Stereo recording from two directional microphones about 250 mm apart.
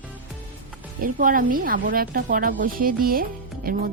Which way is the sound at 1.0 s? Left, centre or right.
Right.